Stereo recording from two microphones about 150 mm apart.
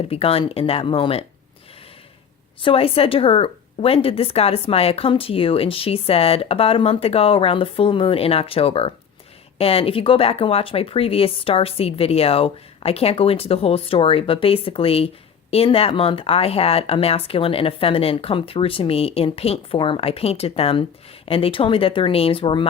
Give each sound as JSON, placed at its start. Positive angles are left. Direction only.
{"t": 0.1, "sound": "speech", "side_deg": 40}
{"t": 2.6, "sound": "speech", "side_deg": 40}